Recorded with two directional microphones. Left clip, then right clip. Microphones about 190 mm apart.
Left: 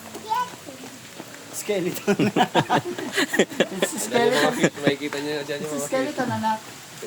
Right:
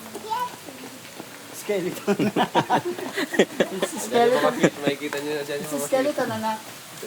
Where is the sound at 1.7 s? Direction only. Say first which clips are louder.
Left 1 dB; 65° left (ahead or behind).